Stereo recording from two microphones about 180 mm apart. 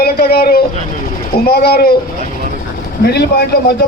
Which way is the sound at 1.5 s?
60° left (ahead or behind).